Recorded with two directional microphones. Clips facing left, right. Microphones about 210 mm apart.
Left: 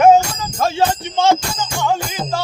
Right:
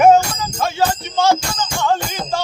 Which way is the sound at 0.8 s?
25° left (ahead or behind).